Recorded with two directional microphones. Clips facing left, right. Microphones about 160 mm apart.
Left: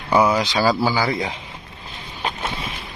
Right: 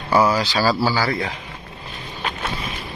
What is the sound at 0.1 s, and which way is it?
Speech, 20° left (ahead or behind).